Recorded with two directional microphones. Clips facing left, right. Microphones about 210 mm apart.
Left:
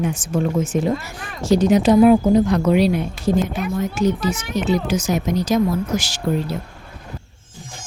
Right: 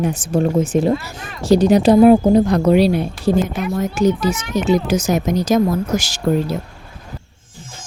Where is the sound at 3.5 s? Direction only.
45° right (ahead or behind).